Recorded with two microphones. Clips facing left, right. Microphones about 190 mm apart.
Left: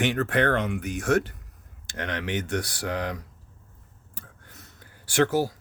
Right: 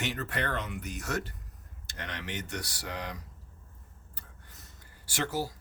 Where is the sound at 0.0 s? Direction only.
80° left.